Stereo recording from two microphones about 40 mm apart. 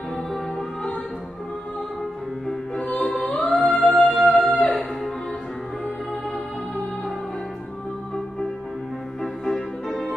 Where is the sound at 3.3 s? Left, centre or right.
Left.